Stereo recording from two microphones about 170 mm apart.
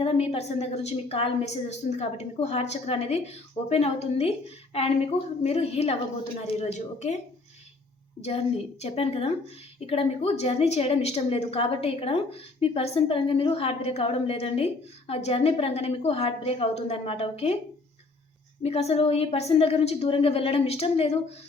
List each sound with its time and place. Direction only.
0.0 s a woman's voice: 35° left (ahead or behind)
8.8 s a woman's voice: 35° left (ahead or behind)
18.6 s a woman's voice: 35° left (ahead or behind)